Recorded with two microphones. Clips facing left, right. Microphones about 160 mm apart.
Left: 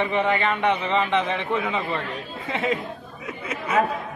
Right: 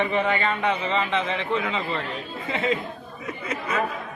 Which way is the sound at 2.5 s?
10° left (ahead or behind).